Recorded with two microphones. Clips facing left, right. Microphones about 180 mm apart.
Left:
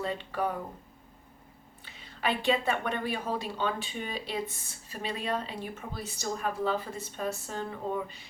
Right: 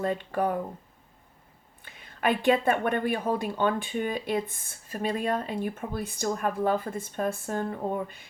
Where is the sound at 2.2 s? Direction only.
50° right (ahead or behind).